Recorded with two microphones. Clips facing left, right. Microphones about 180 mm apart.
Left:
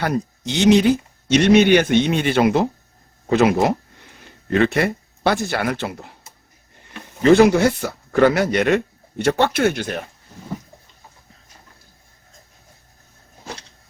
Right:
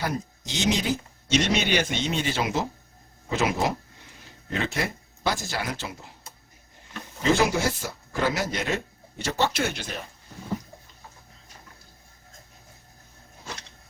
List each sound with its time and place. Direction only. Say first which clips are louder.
0.0 s speech: left 8 dB; 65° left (ahead or behind)
7.2 s speech: left 10 dB; 60° left (ahead or behind)